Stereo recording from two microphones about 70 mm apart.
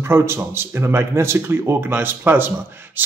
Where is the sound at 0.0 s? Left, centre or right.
Right.